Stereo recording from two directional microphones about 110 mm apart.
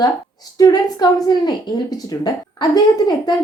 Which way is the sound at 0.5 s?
40° left (ahead or behind).